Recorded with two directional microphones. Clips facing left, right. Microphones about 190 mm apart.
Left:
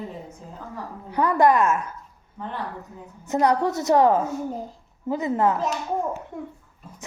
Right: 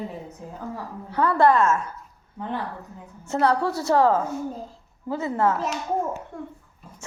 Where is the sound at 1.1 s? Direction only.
15° left (ahead or behind).